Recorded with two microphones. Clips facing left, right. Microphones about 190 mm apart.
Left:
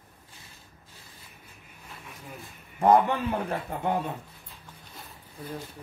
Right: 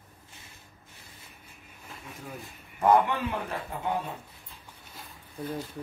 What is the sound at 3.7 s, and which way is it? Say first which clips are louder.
Speech: left 4 dB; 55° left (ahead or behind).